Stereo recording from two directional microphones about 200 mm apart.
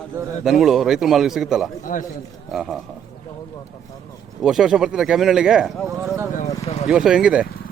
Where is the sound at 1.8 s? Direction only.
40° left (ahead or behind).